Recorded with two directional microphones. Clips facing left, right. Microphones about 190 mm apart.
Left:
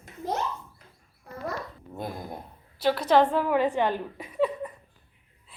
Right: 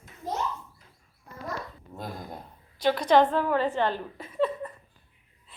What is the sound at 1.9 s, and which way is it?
Speech, 15° left (ahead or behind).